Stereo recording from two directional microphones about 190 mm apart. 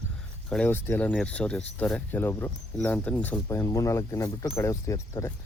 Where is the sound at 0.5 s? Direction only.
10° left (ahead or behind).